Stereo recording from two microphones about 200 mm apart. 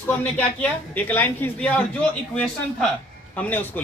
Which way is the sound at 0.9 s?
10° left (ahead or behind).